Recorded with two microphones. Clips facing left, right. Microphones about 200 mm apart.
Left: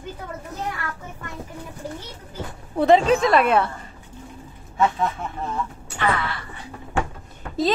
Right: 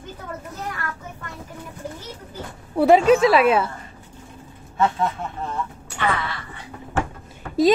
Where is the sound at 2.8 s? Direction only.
10° right (ahead or behind).